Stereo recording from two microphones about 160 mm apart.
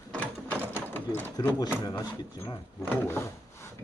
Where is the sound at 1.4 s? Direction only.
25° left (ahead or behind).